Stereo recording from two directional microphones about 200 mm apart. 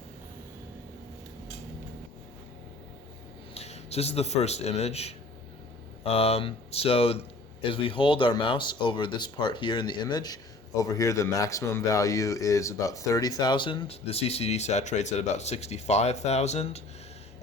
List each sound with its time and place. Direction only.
3.5 s a man's voice: 30° left (ahead or behind)